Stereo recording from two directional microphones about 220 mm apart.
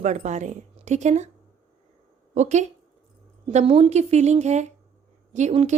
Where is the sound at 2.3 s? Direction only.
30° right (ahead or behind).